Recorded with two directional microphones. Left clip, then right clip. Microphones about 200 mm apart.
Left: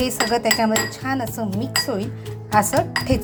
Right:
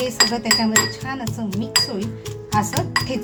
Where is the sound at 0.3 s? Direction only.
30° left (ahead or behind).